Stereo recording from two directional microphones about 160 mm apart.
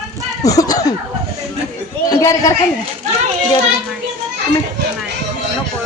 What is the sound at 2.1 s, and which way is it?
Speech, 20° left (ahead or behind).